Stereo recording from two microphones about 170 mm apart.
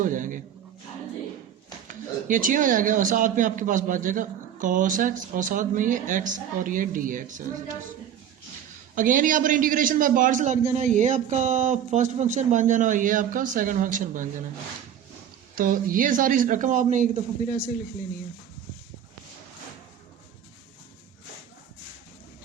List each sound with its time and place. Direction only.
0.0 s speech: 50° right (ahead or behind)
1.9 s speech: 50° right (ahead or behind)
9.0 s speech: 50° right (ahead or behind)
15.5 s speech: 55° right (ahead or behind)